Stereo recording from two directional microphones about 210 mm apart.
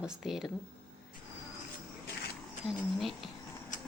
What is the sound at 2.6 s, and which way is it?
Speech, centre (ahead or behind).